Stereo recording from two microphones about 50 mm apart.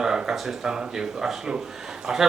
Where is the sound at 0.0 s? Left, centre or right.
Centre.